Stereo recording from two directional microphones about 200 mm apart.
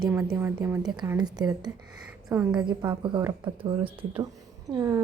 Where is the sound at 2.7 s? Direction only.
20° right (ahead or behind).